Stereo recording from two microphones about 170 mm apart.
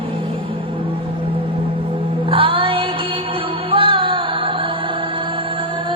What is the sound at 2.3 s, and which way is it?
Music, 30° right (ahead or behind).